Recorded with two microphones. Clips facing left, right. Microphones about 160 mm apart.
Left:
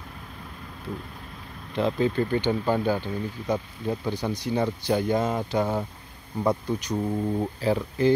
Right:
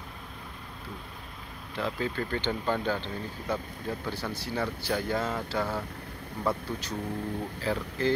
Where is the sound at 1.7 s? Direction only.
20° left (ahead or behind).